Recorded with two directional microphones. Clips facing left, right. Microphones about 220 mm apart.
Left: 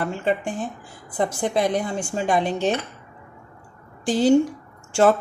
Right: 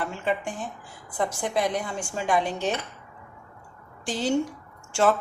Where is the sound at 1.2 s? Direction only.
35° left (ahead or behind).